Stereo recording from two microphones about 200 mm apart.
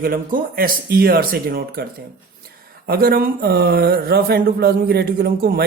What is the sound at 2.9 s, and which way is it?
Speech, 50° right (ahead or behind).